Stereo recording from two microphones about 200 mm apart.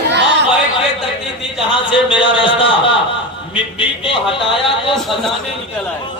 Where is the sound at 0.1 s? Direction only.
60° right (ahead or behind).